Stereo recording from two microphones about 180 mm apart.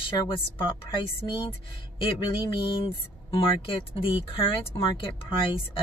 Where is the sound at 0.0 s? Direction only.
30° left (ahead or behind).